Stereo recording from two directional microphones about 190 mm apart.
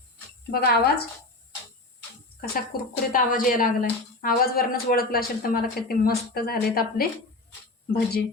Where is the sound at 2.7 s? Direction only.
55° left (ahead or behind).